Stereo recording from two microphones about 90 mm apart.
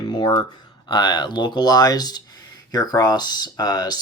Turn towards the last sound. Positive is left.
turn(degrees=45)  # may be behind; listen again after turning